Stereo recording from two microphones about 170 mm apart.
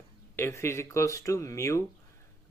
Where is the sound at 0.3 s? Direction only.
15° left (ahead or behind).